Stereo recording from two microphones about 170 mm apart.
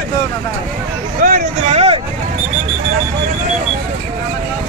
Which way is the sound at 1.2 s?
45° right (ahead or behind).